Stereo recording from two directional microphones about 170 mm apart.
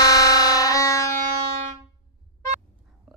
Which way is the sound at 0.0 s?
20° left (ahead or behind).